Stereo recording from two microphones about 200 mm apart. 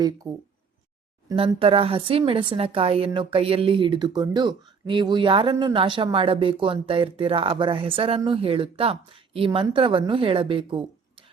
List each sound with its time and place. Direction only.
0.2 s a woman's voice: 20° right (ahead or behind)
1.5 s a woman's voice: 25° right (ahead or behind)